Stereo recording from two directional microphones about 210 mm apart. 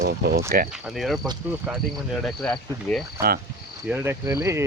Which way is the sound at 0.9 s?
Centre (ahead or behind).